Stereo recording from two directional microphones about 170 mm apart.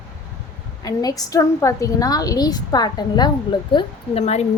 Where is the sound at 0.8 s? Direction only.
20° left (ahead or behind).